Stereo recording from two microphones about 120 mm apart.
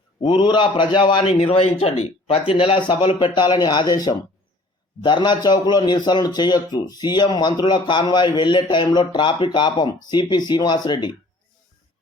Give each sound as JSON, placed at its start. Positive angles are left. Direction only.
{"t": 0.2, "sound": "a man's voice", "side_deg": 40}
{"t": 1.3, "sound": "speech", "side_deg": 50}
{"t": 2.5, "sound": "a man's voice", "side_deg": 45}